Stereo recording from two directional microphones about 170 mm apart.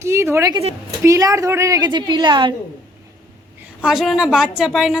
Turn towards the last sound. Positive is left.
turn(degrees=0)  # may be behind; listen again after turning